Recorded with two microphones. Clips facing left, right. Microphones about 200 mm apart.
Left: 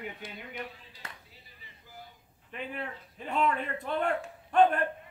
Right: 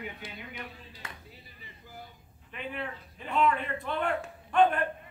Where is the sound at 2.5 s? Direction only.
40° left (ahead or behind).